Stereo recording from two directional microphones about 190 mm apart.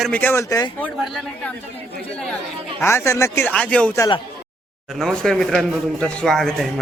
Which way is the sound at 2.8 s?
15° left (ahead or behind).